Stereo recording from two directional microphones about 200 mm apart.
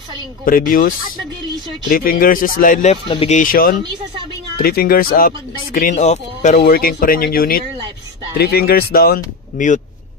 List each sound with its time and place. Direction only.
0.5 s speech: 45° left (ahead or behind)
3.1 s speech: 30° left (ahead or behind)
3.3 s speech: 45° left (ahead or behind)
6.6 s speech: 45° left (ahead or behind)